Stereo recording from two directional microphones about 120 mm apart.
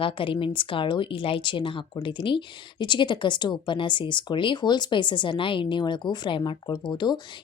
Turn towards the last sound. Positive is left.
turn(degrees=35)  # may be behind; listen again after turning